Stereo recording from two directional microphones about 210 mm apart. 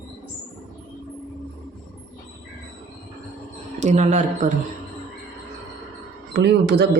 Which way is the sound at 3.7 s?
35° right (ahead or behind).